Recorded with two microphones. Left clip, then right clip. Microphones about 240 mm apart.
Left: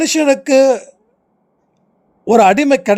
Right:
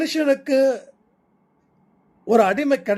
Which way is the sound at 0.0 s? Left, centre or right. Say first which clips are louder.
Left 7 dB; left.